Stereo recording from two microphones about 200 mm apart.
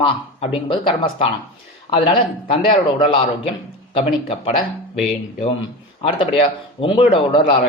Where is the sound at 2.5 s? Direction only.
25° left (ahead or behind).